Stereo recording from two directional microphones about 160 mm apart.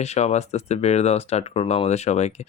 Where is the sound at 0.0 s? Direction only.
45° left (ahead or behind).